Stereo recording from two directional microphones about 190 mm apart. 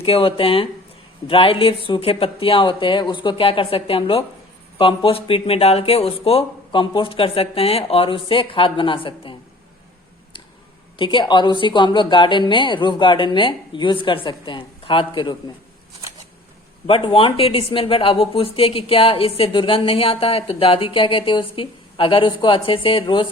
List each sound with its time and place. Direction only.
0.0 s a woman's voice: 30° left (ahead or behind)
10.9 s a woman's voice: 25° left (ahead or behind)
16.8 s a woman's voice: 25° left (ahead or behind)